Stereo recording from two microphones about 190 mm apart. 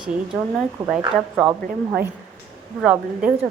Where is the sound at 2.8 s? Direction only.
5° right (ahead or behind).